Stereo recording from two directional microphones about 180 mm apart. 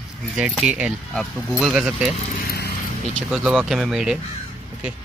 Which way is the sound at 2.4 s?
60° left (ahead or behind).